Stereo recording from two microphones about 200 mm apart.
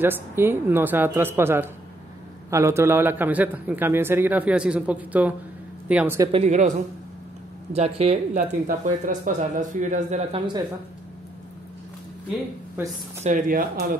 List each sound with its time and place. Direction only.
0.0 s a man's voice: 10° right (ahead or behind)
6.3 s speech: 35° right (ahead or behind)
7.7 s speech: 30° right (ahead or behind)
13.2 s speech: 40° right (ahead or behind)